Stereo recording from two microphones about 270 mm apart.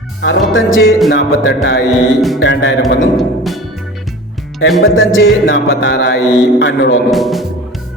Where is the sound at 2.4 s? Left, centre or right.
Left.